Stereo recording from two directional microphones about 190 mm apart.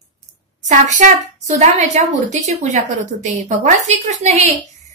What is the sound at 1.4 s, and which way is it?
A woman's voice, 40° right (ahead or behind).